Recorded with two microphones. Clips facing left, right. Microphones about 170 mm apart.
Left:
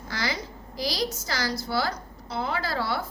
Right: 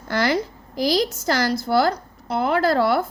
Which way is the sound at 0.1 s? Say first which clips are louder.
Right 10 dB; 55° right (ahead or behind).